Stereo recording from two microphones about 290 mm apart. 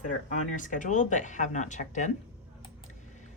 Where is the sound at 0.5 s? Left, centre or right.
Left.